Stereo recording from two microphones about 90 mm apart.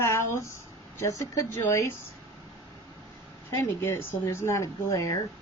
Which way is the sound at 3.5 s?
30° left (ahead or behind).